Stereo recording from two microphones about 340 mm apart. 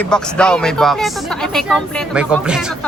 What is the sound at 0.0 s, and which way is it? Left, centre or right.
Speech, centre.